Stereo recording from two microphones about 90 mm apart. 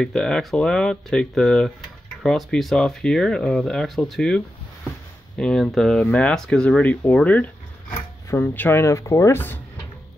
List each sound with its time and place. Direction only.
0.0 s speech: 5° left (ahead or behind)
5.4 s speech: 5° left (ahead or behind); by 9.4 s 35° left (ahead or behind)